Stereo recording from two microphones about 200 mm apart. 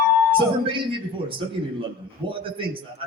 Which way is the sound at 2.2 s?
25° right (ahead or behind).